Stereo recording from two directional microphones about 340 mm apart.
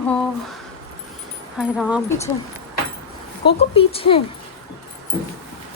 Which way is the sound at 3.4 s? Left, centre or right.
Centre.